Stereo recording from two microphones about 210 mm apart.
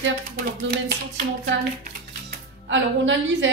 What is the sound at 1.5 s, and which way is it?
Speech, 60° right (ahead or behind).